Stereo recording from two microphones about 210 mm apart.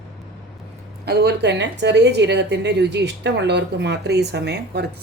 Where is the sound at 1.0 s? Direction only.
50° right (ahead or behind).